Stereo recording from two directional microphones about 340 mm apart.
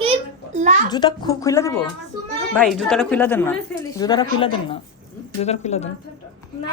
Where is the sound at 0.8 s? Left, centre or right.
Centre.